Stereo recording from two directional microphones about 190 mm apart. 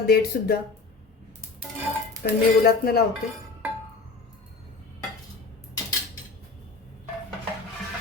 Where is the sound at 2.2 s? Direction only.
50° left (ahead or behind).